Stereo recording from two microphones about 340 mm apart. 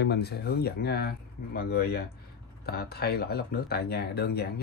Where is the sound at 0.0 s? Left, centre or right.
Left.